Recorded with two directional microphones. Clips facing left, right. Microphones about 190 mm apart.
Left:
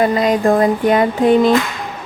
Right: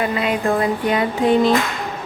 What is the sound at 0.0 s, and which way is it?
Speech, 40° left (ahead or behind).